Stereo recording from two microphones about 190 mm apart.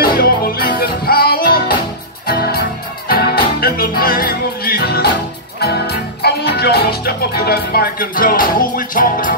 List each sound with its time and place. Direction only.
0.0 s music: 50° left (ahead or behind)